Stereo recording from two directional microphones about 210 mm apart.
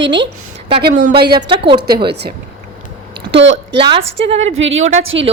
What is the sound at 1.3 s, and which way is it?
Speech, 25° right (ahead or behind).